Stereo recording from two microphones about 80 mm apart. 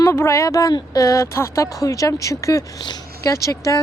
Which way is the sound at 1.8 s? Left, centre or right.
Left.